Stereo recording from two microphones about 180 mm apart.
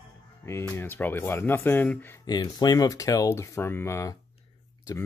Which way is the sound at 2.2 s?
20° left (ahead or behind).